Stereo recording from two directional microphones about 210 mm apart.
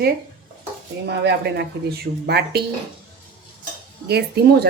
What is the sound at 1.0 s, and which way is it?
Speech, 55° right (ahead or behind).